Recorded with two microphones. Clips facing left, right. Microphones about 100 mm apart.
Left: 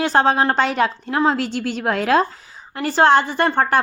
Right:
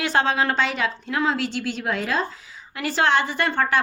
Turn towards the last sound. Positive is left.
turn(degrees=40)  # may be behind; listen again after turning